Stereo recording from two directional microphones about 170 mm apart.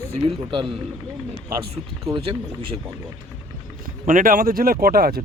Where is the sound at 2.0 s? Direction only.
30° right (ahead or behind).